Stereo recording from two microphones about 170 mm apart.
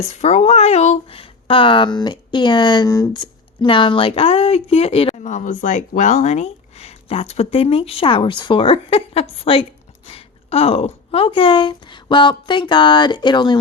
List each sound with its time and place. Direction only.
0.1 s speech: 40° left (ahead or behind)